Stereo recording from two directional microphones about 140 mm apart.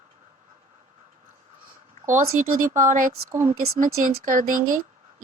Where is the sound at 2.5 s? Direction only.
65° right (ahead or behind).